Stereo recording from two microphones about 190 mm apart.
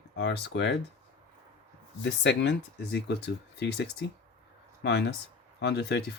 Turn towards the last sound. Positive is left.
turn(degrees=65)  # may be behind; listen again after turning